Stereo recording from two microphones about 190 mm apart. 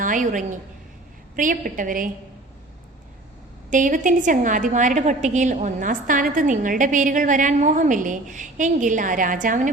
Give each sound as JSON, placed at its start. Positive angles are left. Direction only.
{"t": 0.0, "sound": "a woman's voice", "side_deg": -45}
{"t": 3.7, "sound": "a woman's voice", "side_deg": -40}